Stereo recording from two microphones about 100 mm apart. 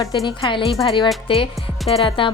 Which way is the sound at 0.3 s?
55° left (ahead or behind).